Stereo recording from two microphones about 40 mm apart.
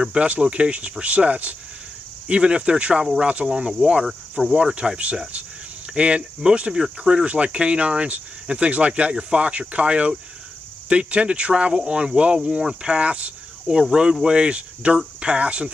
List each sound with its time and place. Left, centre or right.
0.0 s speech: right
13.7 s speech: centre